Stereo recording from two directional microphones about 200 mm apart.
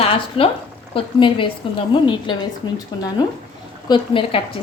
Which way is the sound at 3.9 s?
25° left (ahead or behind).